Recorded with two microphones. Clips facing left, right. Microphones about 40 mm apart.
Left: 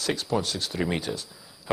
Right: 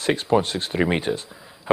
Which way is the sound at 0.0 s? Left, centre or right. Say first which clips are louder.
Right 7 dB; right.